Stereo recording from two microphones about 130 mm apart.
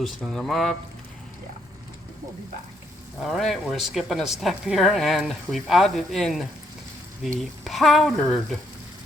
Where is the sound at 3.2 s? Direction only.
Centre (ahead or behind).